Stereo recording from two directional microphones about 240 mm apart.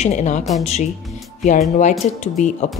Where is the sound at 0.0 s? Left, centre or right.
Left.